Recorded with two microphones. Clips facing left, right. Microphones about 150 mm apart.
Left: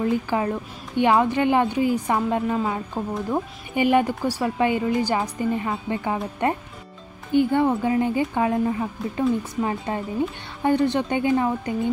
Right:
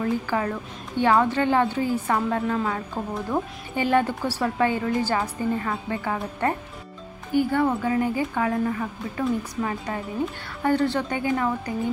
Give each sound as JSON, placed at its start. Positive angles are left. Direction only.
{"t": 0.0, "sound": "a woman's voice", "side_deg": 20}